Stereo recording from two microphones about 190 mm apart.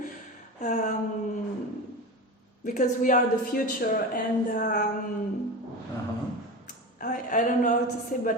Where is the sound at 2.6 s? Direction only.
40° left (ahead or behind).